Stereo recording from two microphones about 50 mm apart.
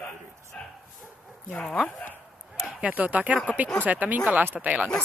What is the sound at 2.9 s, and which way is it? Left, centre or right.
Speech, right.